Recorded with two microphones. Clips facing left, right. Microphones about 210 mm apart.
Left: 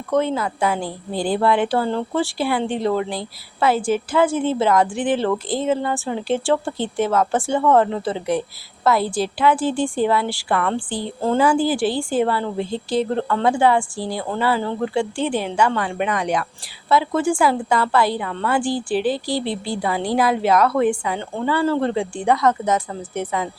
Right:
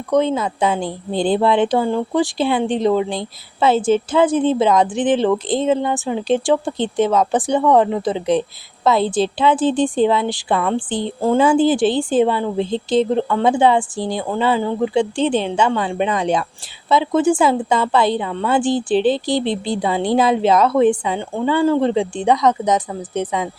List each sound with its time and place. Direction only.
0.1 s speech: 20° right (ahead or behind)